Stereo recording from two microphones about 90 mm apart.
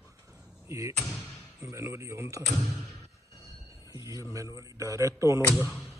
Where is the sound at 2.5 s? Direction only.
Centre (ahead or behind).